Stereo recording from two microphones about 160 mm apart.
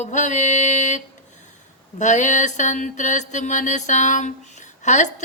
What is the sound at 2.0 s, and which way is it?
Mantra, 50° left (ahead or behind).